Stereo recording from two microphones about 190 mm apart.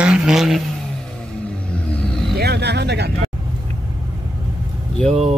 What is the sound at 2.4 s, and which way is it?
Vehicle, 60° right (ahead or behind).